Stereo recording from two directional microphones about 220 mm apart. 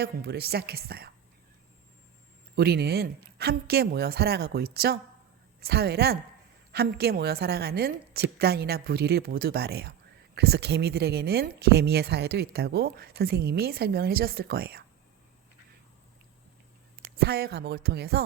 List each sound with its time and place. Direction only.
0.0 s speech: 45° right (ahead or behind)
2.6 s speech: 45° right (ahead or behind)
17.0 s speech: 45° right (ahead or behind)